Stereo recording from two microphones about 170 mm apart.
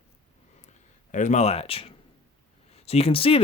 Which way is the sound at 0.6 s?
45° left (ahead or behind).